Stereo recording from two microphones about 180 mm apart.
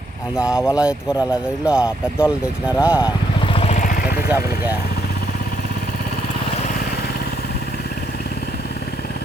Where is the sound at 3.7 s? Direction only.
50° left (ahead or behind).